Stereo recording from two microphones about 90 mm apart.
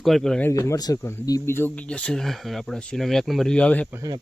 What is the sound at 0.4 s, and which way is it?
Speech, 35° left (ahead or behind).